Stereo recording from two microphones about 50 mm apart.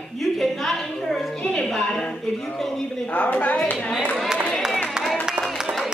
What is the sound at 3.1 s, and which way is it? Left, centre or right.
Speech, left.